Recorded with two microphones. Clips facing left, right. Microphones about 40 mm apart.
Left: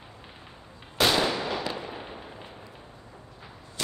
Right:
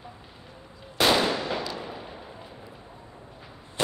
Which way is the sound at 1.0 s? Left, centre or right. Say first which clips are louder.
Right 2 dB; centre.